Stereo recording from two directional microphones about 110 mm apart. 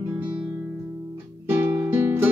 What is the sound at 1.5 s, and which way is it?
Music, 25° right (ahead or behind).